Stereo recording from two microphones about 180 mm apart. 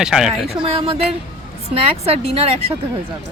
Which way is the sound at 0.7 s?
30° right (ahead or behind).